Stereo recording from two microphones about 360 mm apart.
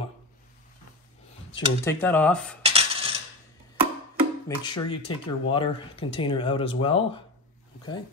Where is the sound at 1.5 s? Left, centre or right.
Centre.